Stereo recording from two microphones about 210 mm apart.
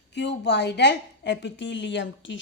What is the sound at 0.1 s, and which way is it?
A woman's voice, 55° left (ahead or behind).